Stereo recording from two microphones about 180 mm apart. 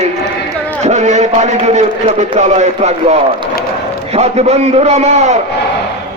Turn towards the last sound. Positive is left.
turn(degrees=-40)  # may be behind; listen again after turning